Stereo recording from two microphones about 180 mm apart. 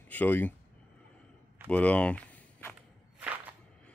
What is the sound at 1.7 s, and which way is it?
Speech, 10° left (ahead or behind).